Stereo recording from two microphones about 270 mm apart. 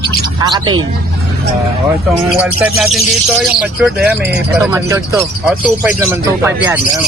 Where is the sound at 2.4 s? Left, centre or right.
Centre.